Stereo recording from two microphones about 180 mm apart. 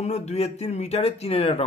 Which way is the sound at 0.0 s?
35° left (ahead or behind).